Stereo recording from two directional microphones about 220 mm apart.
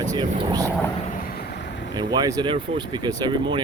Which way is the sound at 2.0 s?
20° right (ahead or behind).